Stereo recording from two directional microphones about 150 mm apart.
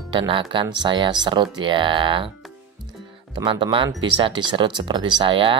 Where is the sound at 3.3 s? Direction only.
35° right (ahead or behind).